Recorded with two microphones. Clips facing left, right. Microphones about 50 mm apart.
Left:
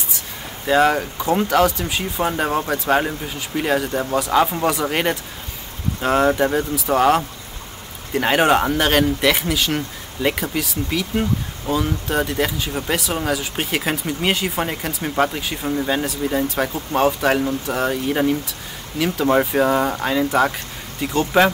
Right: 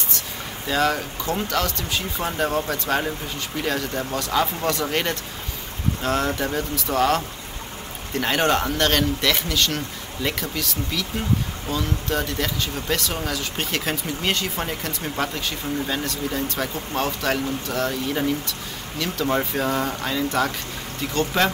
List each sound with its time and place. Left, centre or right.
0.7 s speech: centre